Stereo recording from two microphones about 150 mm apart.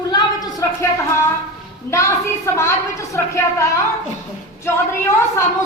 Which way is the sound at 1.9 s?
20° left (ahead or behind).